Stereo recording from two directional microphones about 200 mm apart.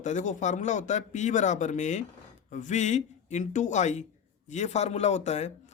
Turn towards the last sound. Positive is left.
turn(degrees=35)  # may be behind; listen again after turning